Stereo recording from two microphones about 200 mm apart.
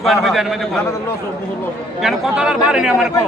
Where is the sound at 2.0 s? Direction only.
Centre (ahead or behind).